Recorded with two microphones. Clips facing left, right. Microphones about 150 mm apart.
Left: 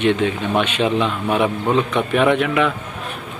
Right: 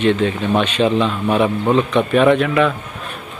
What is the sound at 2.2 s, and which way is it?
Speech, 15° left (ahead or behind).